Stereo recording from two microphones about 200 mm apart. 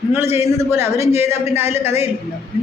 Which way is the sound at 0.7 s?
10° right (ahead or behind).